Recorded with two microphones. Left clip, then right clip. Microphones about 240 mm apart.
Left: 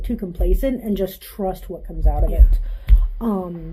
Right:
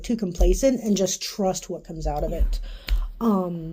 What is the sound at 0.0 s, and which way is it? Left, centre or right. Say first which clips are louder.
Speech: right 1 dB; right.